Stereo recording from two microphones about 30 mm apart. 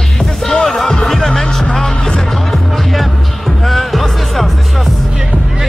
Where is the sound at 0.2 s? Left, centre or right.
Centre.